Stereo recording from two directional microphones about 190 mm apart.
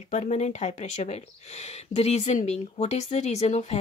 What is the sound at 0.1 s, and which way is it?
Speech, 35° left (ahead or behind).